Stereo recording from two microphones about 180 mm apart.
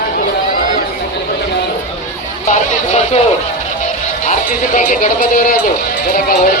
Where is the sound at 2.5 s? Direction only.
40° left (ahead or behind).